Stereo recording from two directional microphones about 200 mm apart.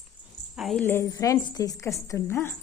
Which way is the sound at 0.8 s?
15° left (ahead or behind).